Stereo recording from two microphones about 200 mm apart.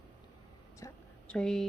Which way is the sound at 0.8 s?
15° left (ahead or behind).